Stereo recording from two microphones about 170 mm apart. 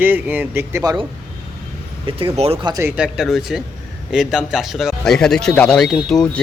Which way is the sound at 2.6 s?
20° right (ahead or behind).